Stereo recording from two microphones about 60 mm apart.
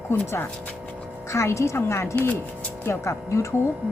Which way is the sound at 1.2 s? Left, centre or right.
Left.